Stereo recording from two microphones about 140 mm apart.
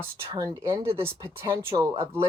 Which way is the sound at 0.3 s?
20° right (ahead or behind).